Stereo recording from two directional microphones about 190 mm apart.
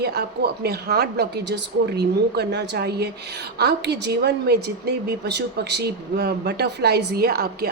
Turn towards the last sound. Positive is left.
turn(degrees=-55)  # may be behind; listen again after turning